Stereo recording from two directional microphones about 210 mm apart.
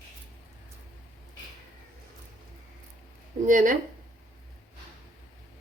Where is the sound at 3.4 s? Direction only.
40° right (ahead or behind).